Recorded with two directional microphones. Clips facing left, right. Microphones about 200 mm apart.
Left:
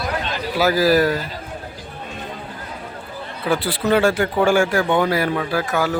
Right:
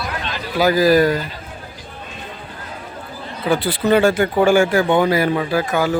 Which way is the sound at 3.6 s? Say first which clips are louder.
Right 3 dB; centre (ahead or behind).